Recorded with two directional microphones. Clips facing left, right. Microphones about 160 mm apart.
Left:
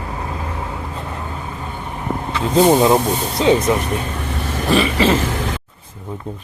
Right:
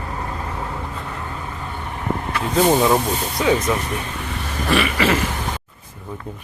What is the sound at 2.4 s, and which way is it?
Speech, 25° left (ahead or behind).